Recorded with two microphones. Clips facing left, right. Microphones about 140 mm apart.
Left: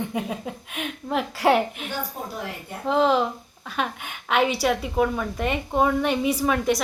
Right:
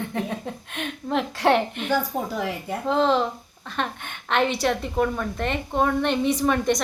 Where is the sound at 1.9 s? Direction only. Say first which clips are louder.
Right 7 dB; 90° right.